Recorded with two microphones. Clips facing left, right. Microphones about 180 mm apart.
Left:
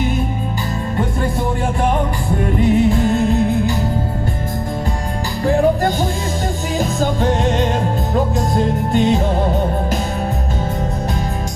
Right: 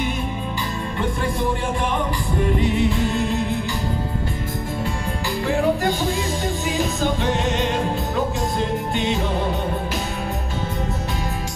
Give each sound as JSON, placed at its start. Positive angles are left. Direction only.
{"t": 2.6, "sound": "music", "side_deg": 45}
{"t": 5.4, "sound": "music", "side_deg": 45}